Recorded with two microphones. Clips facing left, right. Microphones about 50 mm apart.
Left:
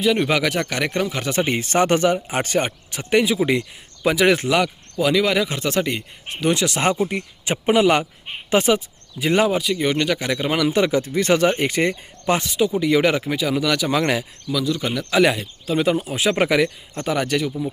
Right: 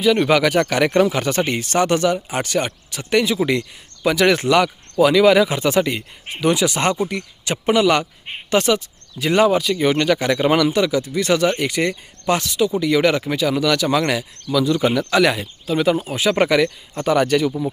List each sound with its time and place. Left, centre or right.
0.0 s speech: centre
1.5 s speech: left; by 6.8 s centre
6.8 s speech: centre
10.7 s speech: left; by 14.0 s centre
14.0 s speech: left
14.5 s speech: centre
15.1 s speech: centre